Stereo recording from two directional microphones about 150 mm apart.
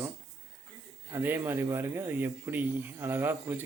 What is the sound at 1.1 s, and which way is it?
A man's voice, 15° right (ahead or behind).